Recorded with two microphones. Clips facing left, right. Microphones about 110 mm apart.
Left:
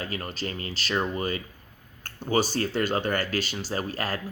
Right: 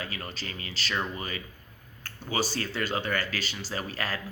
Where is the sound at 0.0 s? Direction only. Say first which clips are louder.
Left 5 dB; 40° left (ahead or behind).